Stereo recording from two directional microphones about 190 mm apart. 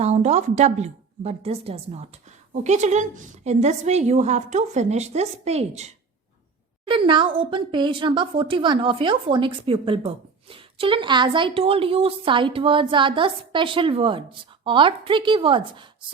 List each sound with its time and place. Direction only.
0.0 s a woman's voice: 35° right (ahead or behind)